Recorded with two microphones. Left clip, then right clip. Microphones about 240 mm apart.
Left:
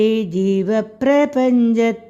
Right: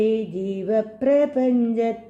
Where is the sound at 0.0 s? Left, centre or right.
Left.